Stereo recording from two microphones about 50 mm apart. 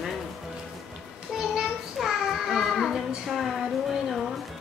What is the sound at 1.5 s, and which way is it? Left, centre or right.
Child singing, centre.